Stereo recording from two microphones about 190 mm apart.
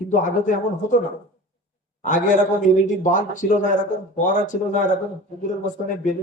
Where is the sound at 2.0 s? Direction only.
40° left (ahead or behind).